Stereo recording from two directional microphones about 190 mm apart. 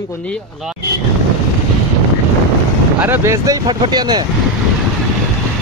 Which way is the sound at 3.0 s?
15° right (ahead or behind).